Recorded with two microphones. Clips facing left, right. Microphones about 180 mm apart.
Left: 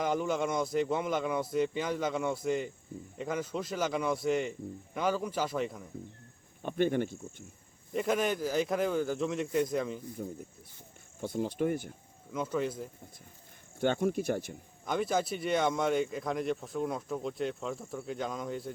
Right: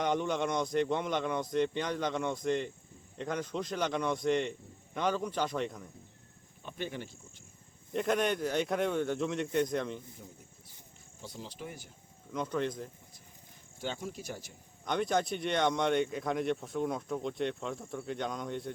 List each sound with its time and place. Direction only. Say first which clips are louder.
0.0 s speech: left 1 dB; 5° left (ahead or behind)
6.6 s speech: left 11 dB; 55° left (ahead or behind)
7.9 s speech: even; centre (ahead or behind)
10.2 s speech: left 12 dB; 55° left (ahead or behind)
12.3 s speech: left 1 dB; 5° left (ahead or behind)
13.7 s speech: left 10 dB; 60° left (ahead or behind)
14.8 s speech: even; 5° left (ahead or behind)